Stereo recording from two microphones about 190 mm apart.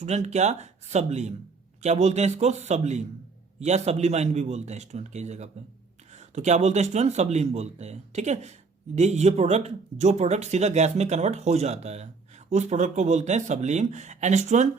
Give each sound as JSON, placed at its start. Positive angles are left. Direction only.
{"t": 0.0, "sound": "speech", "side_deg": -35}